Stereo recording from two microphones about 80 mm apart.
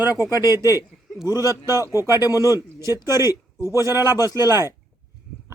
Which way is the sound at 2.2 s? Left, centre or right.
Left.